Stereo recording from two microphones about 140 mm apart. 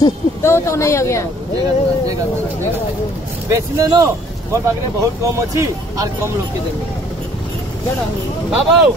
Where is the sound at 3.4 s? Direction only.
25° right (ahead or behind).